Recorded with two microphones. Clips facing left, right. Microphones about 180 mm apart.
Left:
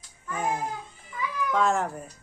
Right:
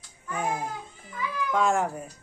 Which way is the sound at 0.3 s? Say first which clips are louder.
Even; centre (ahead or behind).